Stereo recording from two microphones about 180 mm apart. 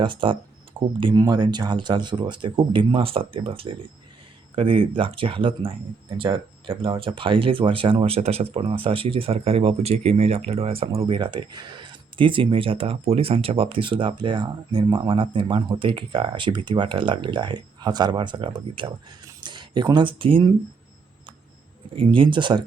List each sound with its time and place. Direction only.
0.0 s speech: 25° right (ahead or behind)
21.9 s speech: 30° right (ahead or behind)